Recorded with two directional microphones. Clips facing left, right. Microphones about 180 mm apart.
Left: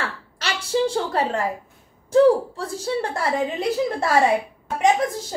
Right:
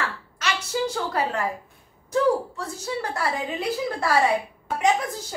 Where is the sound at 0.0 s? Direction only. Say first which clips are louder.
Even; 30° left (ahead or behind).